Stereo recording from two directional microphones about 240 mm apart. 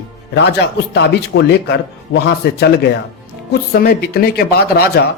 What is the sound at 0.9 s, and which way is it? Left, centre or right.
Speech, left.